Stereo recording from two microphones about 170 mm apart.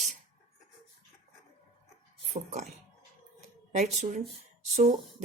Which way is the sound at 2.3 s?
40° right (ahead or behind).